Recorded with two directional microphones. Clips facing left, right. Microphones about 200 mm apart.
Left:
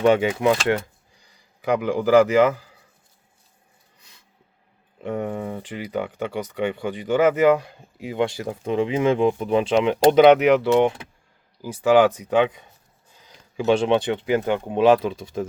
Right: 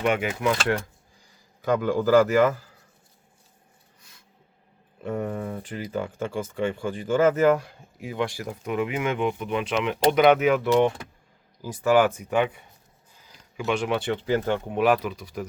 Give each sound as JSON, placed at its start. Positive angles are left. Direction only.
{"t": 0.0, "sound": "speech", "side_deg": 30}
{"t": 1.6, "sound": "a man's voice", "side_deg": 15}
{"t": 5.0, "sound": "speech", "side_deg": 15}
{"t": 12.2, "sound": "speech", "side_deg": 20}
{"t": 13.6, "sound": "speech", "side_deg": 30}